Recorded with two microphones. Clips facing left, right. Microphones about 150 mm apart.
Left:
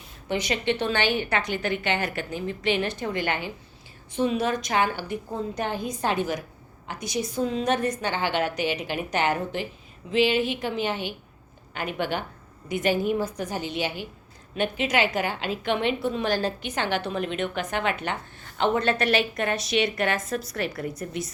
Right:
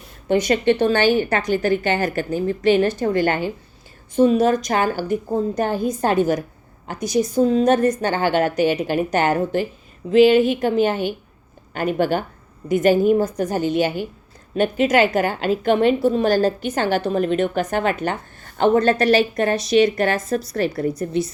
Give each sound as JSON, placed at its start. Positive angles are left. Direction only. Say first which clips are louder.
{"t": 0.3, "sound": "a woman's voice", "louder": "right 9 dB", "side_deg": -50}